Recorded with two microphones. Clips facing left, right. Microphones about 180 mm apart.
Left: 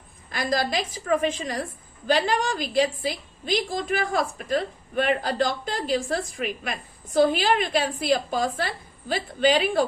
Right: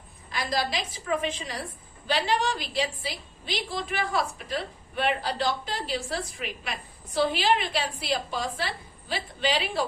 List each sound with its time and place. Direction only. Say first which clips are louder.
0.3 s a woman's voice: left 4 dB; 50° left (ahead or behind)